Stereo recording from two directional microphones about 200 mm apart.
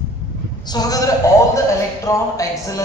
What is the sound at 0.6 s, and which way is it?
A man's voice, 20° left (ahead or behind).